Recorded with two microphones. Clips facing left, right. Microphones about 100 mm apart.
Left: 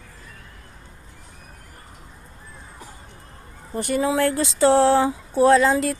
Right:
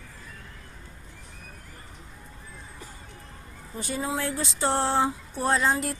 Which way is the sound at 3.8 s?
70° left (ahead or behind).